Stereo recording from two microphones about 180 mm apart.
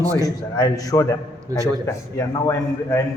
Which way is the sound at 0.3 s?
20° left (ahead or behind).